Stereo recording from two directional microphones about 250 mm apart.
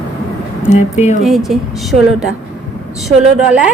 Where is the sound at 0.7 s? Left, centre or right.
Left.